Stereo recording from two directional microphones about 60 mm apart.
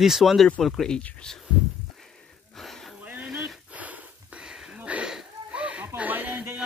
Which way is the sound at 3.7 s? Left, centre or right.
Right.